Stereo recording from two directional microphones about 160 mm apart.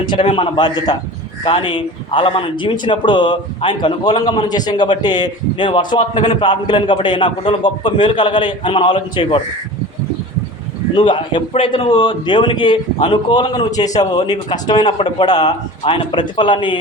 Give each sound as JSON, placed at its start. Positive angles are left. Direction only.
{"t": 0.1, "sound": "a man's voice", "side_deg": 30}
{"t": 10.9, "sound": "a man's voice", "side_deg": 30}